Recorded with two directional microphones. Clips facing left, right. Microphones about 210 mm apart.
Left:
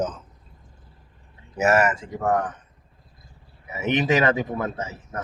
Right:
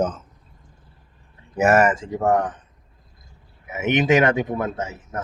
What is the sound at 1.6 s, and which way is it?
Speech, 55° right (ahead or behind).